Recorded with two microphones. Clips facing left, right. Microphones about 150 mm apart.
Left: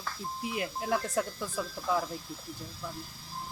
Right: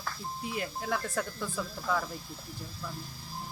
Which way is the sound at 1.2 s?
5° left (ahead or behind).